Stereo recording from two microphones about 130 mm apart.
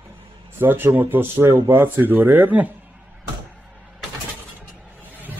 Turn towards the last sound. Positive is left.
turn(degrees=-15)  # may be behind; listen again after turning